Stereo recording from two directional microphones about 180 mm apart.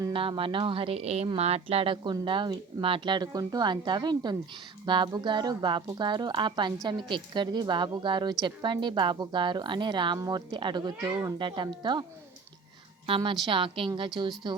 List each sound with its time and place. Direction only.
0.0 s speech: 30° right (ahead or behind)
13.1 s speech: 30° right (ahead or behind)